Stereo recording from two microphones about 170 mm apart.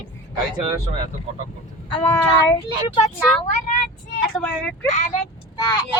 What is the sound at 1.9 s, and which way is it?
Child singing, 30° left (ahead or behind).